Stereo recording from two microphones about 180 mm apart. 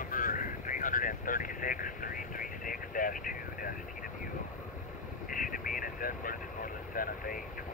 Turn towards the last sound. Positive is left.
turn(degrees=50)  # may be behind; listen again after turning